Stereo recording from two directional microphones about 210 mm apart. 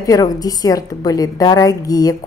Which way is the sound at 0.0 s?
15° left (ahead or behind).